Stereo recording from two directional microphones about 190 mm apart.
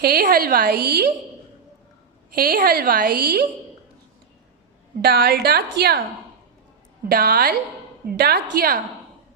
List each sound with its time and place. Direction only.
0.0 s a woman's voice: 55° right (ahead or behind)
2.3 s a woman's voice: 50° right (ahead or behind)
5.0 s a woman's voice: 55° right (ahead or behind)
7.1 s a woman's voice: 55° right (ahead or behind)